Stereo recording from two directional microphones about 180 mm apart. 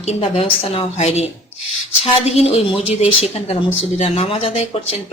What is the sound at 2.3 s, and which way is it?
Speech, 35° left (ahead or behind).